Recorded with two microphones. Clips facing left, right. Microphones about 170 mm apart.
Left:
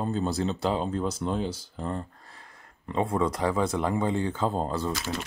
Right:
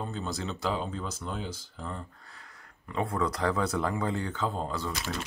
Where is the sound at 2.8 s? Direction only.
25° left (ahead or behind).